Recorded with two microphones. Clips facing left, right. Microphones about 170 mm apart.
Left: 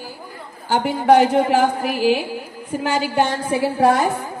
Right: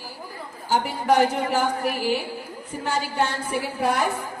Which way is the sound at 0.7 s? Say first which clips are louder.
Left 6 dB; 90° left.